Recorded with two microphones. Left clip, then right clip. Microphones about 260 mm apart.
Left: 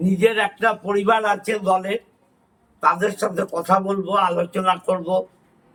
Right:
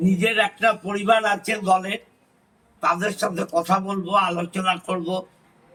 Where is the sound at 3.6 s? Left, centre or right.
Centre.